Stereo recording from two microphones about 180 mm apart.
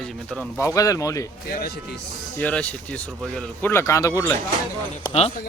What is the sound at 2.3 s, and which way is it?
A man's voice, 10° left (ahead or behind).